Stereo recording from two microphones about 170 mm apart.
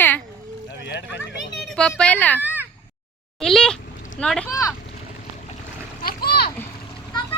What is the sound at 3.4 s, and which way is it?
Speech, 5° left (ahead or behind).